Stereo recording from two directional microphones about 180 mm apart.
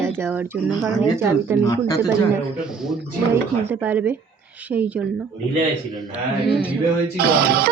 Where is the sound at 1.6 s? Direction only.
20° left (ahead or behind).